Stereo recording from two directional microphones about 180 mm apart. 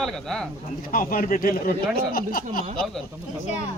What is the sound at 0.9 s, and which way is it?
A man's voice, 50° left (ahead or behind).